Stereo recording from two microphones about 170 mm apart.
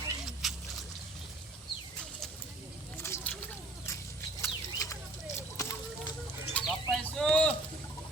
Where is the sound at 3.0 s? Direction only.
15° left (ahead or behind).